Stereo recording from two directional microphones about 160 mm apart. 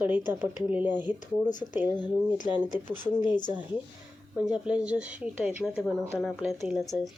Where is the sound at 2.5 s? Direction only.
10° right (ahead or behind).